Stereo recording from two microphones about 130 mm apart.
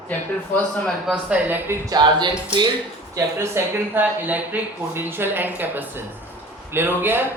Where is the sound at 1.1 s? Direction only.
10° right (ahead or behind).